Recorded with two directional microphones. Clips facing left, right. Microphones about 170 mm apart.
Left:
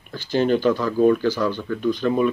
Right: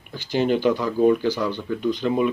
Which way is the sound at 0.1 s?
15° right (ahead or behind).